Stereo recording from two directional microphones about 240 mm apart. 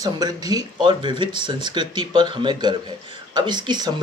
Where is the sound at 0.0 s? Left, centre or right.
Centre.